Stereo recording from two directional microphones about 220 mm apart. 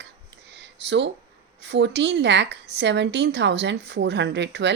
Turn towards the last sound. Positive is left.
turn(degrees=-50)  # may be behind; listen again after turning